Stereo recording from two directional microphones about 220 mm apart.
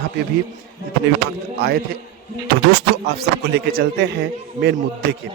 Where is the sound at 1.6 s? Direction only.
45° right (ahead or behind).